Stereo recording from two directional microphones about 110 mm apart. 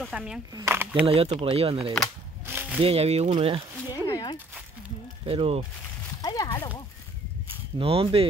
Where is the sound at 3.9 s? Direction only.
35° left (ahead or behind).